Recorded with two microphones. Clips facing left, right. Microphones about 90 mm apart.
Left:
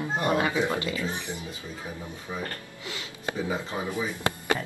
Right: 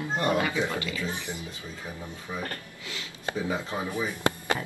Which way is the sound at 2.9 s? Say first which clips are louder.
Right 1 dB; 20° left (ahead or behind).